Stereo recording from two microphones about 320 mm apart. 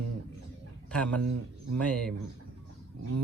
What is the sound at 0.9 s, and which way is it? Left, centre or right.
A man's voice, centre.